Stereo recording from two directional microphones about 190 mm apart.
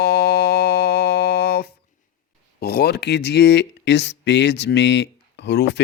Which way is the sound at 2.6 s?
55° left (ahead or behind).